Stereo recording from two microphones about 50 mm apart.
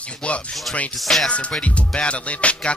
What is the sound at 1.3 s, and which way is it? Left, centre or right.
Music, left.